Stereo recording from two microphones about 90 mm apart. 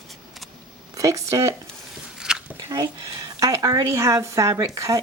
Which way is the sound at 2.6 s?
40° right (ahead or behind).